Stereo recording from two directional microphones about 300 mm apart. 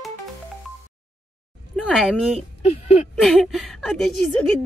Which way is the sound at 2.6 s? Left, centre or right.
Left.